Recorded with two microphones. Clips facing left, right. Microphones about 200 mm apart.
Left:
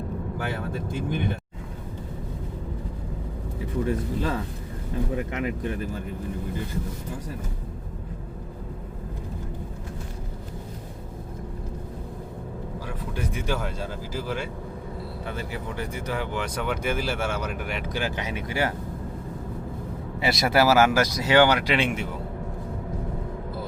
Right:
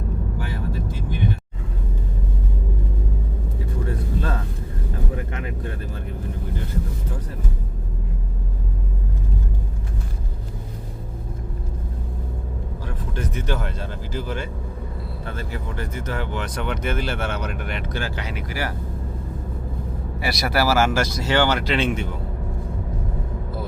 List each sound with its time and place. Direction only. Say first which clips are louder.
0.7 s vehicle: left 1 dB; 50° left (ahead or behind)
3.8 s speech: left 1 dB; 15° left (ahead or behind)
13.1 s speech: right 2 dB; 10° left (ahead or behind)
20.1 s speech: left 2 dB; 20° left (ahead or behind)